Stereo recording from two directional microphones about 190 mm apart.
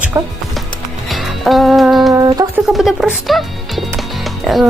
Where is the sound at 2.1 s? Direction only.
20° right (ahead or behind).